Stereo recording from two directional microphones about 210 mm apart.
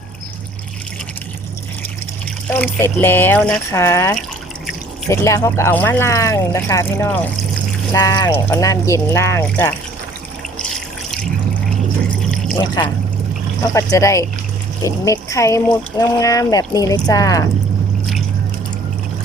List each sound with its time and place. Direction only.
2.5 s speech: 10° left (ahead or behind)
10.6 s water: centre (ahead or behind)
12.5 s speech: 20° left (ahead or behind)
13.9 s speech: 15° left (ahead or behind)